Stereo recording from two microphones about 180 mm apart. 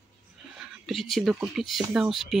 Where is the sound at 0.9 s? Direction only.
Centre (ahead or behind).